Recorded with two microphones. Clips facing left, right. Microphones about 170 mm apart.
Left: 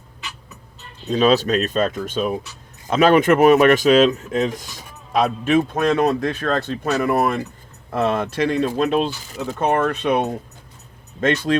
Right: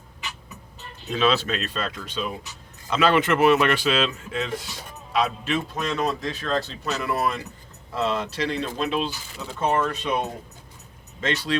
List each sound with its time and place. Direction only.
1.0 s speech: 40° left (ahead or behind); by 10.2 s 60° left (ahead or behind)
11.2 s speech: 45° left (ahead or behind)